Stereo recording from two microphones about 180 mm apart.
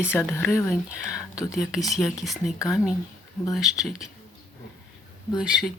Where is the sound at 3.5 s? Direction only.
Centre (ahead or behind).